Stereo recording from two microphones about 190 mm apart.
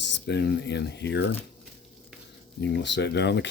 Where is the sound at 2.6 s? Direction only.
65° left (ahead or behind).